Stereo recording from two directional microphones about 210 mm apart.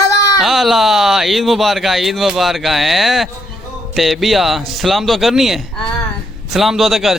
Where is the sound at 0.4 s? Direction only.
Centre (ahead or behind).